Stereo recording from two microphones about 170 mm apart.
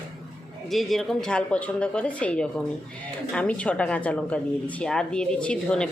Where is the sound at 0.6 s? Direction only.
Centre (ahead or behind).